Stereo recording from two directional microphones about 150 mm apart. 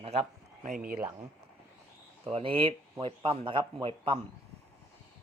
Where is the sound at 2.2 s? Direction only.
40° right (ahead or behind).